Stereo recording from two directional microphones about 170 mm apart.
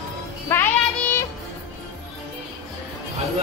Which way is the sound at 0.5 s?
15° left (ahead or behind).